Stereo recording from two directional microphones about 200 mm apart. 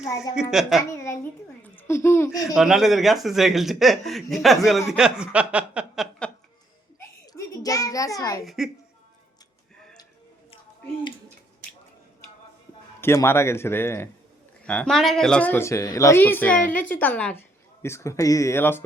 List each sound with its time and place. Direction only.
0.4 s speech: 5° right (ahead or behind)
0.9 s a sound: 15° left (ahead or behind)
1.7 s speech: 15° left (ahead or behind)
2.6 s speech: centre (ahead or behind)
7.3 s a child's voice: 15° left (ahead or behind)
8.4 s speech: centre (ahead or behind)
13.0 s speech: 10° left (ahead or behind)